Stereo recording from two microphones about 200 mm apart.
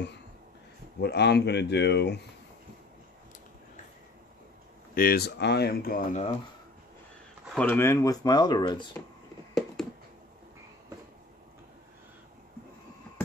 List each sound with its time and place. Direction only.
1.0 s speech: 55° left (ahead or behind)
4.9 s speech: 50° left (ahead or behind)
7.5 s speech: 10° left (ahead or behind)
9.5 s a sound: centre (ahead or behind)